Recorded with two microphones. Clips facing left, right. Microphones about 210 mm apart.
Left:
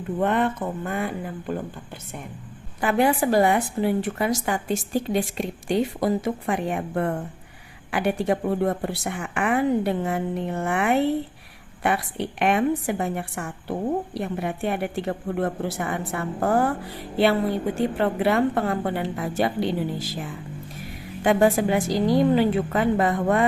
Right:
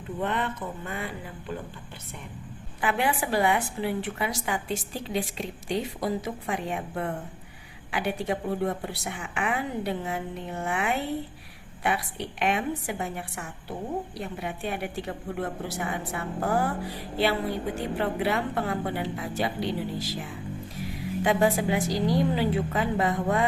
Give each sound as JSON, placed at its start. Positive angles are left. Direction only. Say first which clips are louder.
{"t": 0.2, "sound": "speech", "louder": "left 7 dB", "side_deg": 50}
{"t": 2.8, "sound": "speech", "louder": "left 6 dB", "side_deg": 45}
{"t": 17.7, "sound": "speech", "louder": "left 5 dB", "side_deg": 50}
{"t": 21.2, "sound": "a woman's voice", "louder": "left 5 dB", "side_deg": 50}